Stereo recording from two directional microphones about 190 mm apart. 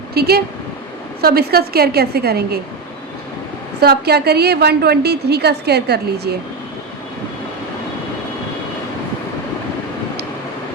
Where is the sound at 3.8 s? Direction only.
60° right (ahead or behind).